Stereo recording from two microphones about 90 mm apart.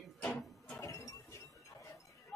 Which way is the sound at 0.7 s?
40° left (ahead or behind).